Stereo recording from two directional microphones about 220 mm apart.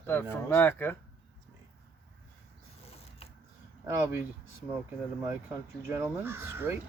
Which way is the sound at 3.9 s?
10° right (ahead or behind).